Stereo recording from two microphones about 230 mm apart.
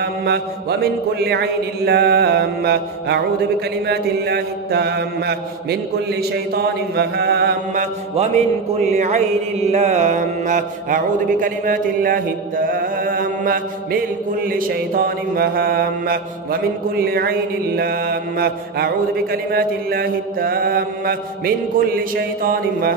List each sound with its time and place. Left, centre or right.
0.0 s mantra: right